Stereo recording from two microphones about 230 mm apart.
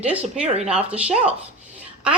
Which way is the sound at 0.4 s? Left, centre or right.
Right.